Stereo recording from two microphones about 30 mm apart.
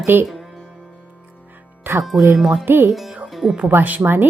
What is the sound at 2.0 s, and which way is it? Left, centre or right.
Speech, centre.